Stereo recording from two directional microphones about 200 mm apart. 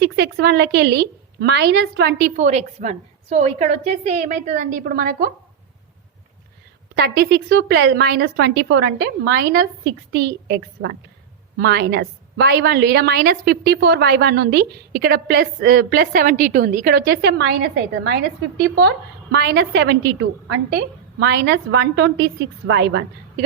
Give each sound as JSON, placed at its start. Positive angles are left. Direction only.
{"t": 0.0, "sound": "a woman's voice", "side_deg": -55}
{"t": 6.9, "sound": "a woman's voice", "side_deg": -50}